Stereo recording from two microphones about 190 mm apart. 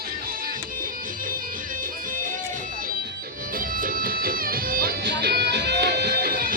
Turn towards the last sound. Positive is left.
turn(degrees=-50)  # may be behind; listen again after turning